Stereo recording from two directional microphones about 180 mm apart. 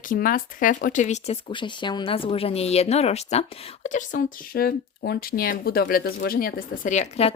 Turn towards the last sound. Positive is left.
turn(degrees=40)  # may be behind; listen again after turning